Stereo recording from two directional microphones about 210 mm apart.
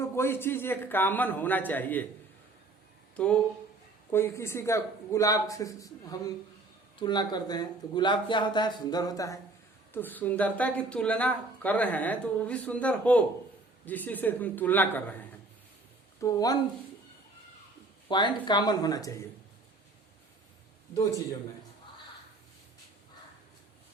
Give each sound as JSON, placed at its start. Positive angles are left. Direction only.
{"t": 0.0, "sound": "speech", "side_deg": 10}
{"t": 4.1, "sound": "speech", "side_deg": 10}
{"t": 18.1, "sound": "speech", "side_deg": 20}